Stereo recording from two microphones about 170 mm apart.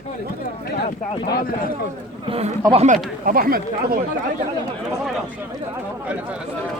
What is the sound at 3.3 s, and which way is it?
Speech, 60° right (ahead or behind).